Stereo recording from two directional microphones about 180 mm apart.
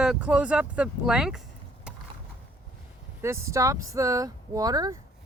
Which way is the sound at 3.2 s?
15° right (ahead or behind).